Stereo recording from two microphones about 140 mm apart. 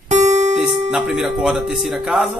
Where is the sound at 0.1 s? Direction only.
55° right (ahead or behind).